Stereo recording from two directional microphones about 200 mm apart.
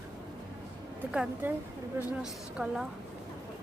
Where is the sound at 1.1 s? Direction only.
5° right (ahead or behind).